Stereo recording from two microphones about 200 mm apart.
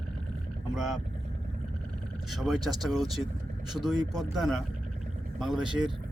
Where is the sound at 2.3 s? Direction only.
Centre (ahead or behind).